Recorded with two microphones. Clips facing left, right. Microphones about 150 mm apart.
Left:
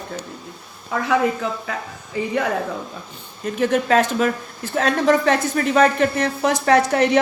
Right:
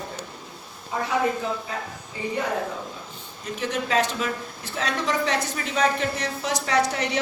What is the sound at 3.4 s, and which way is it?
Speech, 50° left (ahead or behind).